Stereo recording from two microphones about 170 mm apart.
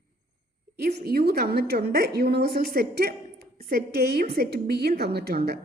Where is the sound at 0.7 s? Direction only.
65° right (ahead or behind).